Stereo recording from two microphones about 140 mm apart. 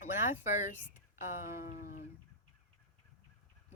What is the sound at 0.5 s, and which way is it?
Speech, 60° left (ahead or behind).